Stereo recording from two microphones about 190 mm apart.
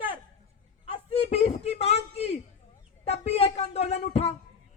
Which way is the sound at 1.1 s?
35° left (ahead or behind).